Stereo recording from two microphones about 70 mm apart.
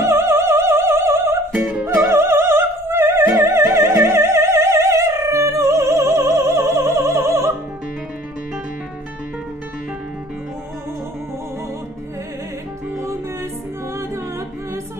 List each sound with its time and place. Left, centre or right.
0.0 s opera: right
1.5 s music: centre
2.0 s opera: right
3.3 s music: right